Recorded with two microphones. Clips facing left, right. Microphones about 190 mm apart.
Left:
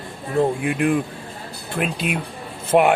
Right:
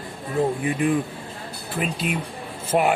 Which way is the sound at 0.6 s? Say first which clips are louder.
Left 2 dB; 65° left (ahead or behind).